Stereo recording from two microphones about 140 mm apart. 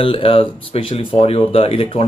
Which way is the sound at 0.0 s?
40° left (ahead or behind).